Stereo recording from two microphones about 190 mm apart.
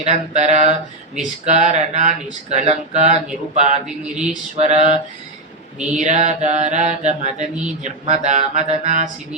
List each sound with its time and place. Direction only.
0.0 s speech: 35° right (ahead or behind)
3.8 s a sound: 5° right (ahead or behind)
4.3 s speech: 35° right (ahead or behind)
6.0 s speech: 40° right (ahead or behind)